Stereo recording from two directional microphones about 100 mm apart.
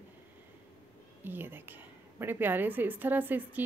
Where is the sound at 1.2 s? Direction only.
20° right (ahead or behind).